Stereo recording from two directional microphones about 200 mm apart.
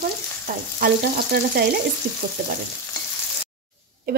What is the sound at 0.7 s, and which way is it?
Speech, 45° right (ahead or behind).